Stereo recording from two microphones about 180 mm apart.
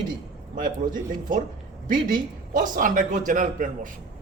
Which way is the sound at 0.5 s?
50° right (ahead or behind).